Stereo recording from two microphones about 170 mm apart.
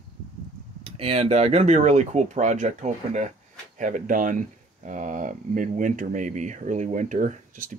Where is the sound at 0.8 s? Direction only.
35° right (ahead or behind).